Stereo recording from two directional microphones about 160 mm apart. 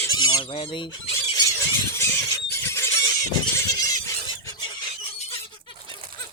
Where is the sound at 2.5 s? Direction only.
15° left (ahead or behind).